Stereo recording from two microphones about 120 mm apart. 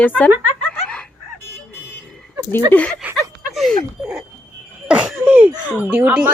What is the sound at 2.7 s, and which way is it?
Speech, 15° left (ahead or behind).